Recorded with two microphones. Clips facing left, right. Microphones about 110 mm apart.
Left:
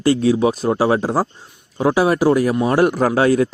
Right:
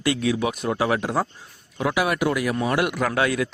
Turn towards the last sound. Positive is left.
turn(degrees=35)  # may be behind; listen again after turning